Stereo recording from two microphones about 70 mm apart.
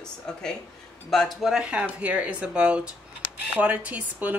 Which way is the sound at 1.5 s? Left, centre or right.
Centre.